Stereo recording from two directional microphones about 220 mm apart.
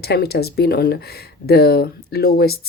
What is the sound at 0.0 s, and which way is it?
Speech, 45° left (ahead or behind).